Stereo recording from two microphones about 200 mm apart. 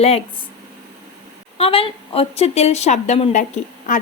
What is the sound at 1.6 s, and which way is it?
A woman's voice, 30° left (ahead or behind).